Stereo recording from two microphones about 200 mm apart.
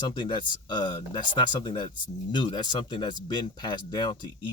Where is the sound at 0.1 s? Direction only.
25° left (ahead or behind).